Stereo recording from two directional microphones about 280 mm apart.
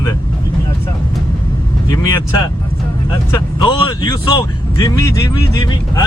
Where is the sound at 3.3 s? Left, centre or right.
Centre.